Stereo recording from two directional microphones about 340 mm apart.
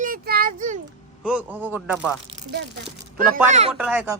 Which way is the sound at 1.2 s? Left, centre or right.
Centre.